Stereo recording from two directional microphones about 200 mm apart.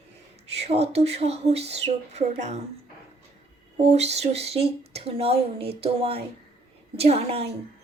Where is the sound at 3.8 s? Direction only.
35° right (ahead or behind).